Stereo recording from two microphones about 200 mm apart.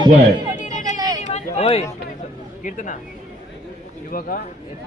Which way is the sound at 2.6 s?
40° left (ahead or behind).